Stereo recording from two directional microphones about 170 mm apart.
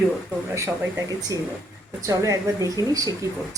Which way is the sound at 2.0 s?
20° right (ahead or behind).